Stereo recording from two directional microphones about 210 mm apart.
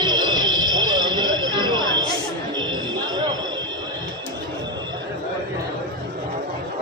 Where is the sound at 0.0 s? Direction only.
20° right (ahead or behind).